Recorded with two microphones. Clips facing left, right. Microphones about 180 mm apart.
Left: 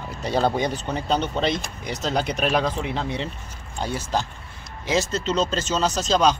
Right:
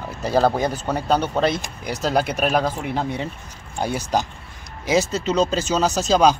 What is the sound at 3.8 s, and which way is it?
Speech, 15° right (ahead or behind).